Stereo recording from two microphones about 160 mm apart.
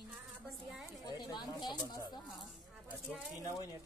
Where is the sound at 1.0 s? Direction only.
25° left (ahead or behind).